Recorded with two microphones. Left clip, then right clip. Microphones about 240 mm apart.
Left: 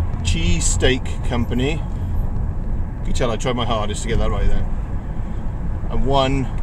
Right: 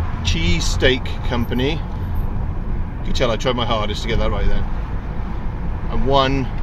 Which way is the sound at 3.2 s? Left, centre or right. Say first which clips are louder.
Right 2 dB; centre.